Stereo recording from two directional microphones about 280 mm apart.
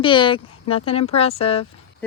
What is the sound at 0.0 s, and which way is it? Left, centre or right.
Speech, centre.